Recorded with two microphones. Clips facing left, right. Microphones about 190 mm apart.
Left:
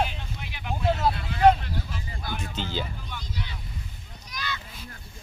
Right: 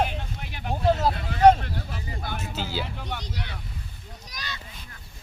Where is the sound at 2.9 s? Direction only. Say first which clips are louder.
Right 3 dB; 70° right (ahead or behind).